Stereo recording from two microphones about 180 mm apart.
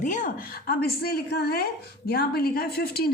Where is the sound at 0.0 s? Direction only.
45° left (ahead or behind).